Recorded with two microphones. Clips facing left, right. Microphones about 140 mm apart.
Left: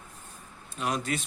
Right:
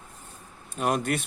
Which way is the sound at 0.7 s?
50° right (ahead or behind).